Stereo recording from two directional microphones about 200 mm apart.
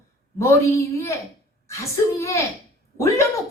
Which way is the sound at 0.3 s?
15° left (ahead or behind).